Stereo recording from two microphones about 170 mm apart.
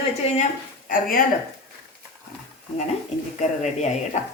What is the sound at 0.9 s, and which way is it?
Speech, 55° left (ahead or behind).